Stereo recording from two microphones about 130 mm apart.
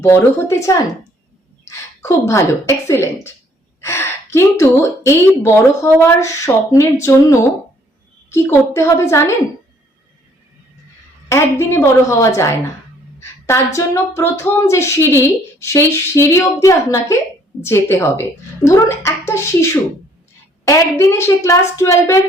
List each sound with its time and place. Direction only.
0.0 s a woman's voice: 20° left (ahead or behind)
8.3 s speech: 20° left (ahead or behind)
11.3 s speech: 20° left (ahead or behind)
13.7 s speech: 20° left (ahead or behind)